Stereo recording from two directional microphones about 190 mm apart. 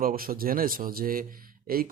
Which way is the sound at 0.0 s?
50° right (ahead or behind).